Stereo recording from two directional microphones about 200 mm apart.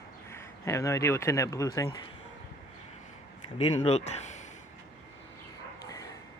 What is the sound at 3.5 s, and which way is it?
Speech, 30° left (ahead or behind).